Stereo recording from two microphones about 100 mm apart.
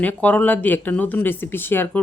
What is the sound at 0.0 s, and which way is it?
Speech, 15° left (ahead or behind).